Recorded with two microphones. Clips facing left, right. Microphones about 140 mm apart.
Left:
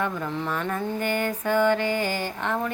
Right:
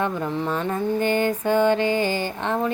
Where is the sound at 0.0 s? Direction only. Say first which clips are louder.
Right 3 dB; 20° right (ahead or behind).